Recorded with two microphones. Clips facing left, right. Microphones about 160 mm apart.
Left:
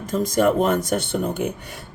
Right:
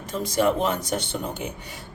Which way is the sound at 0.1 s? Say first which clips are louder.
Left 4 dB; 45° left (ahead or behind).